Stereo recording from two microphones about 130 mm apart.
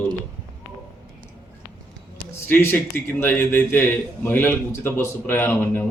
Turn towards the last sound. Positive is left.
turn(degrees=15)  # may be behind; listen again after turning